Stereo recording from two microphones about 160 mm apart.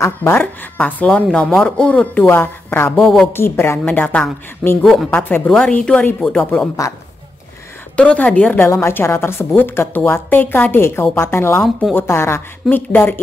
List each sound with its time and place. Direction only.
0.0 s a woman's voice: 15° left (ahead or behind)
3.0 s a woman's voice: centre (ahead or behind)
3.3 s a woman's voice: 15° left (ahead or behind); by 5.1 s centre (ahead or behind)
5.1 s a woman's voice: 15° left (ahead or behind)
7.9 s a woman's voice: 5° left (ahead or behind)